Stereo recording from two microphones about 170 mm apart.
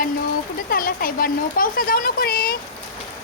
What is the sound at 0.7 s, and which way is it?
Speech, 55° left (ahead or behind).